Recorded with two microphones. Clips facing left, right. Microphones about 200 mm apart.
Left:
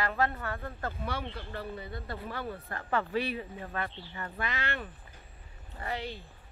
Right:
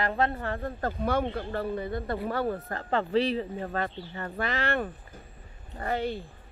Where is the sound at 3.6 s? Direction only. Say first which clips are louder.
Right 6 dB; 40° right (ahead or behind).